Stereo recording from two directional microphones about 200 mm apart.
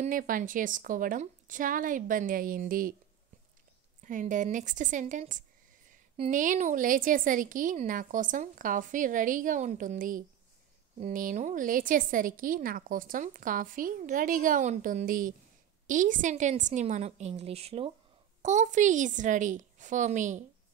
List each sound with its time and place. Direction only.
0.0 s a woman's voice: 40° right (ahead or behind)
4.0 s a woman's voice: 40° right (ahead or behind)